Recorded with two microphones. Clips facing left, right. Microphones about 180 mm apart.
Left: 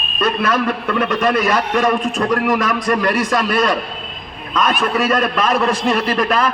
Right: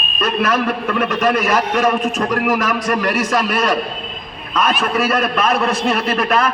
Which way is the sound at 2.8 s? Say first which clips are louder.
Left 1 dB; 30° left (ahead or behind).